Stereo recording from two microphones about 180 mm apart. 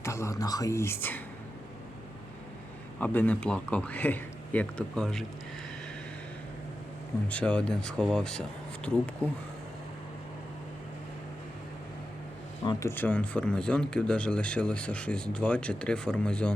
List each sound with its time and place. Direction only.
0.0 s speech: 15° left (ahead or behind)
3.0 s speech: 10° left (ahead or behind)
7.3 s speech: 5° left (ahead or behind)
12.6 s speech: 15° left (ahead or behind)